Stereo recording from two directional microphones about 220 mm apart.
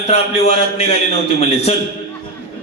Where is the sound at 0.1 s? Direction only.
30° left (ahead or behind).